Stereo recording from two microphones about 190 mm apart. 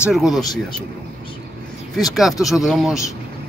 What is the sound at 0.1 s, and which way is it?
Speech, centre (ahead or behind).